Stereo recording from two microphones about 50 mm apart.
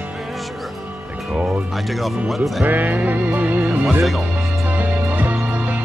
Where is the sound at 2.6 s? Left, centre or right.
Right.